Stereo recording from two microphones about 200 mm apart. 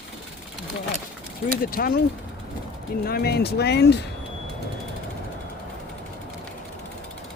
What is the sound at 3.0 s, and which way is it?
Speech, 50° left (ahead or behind).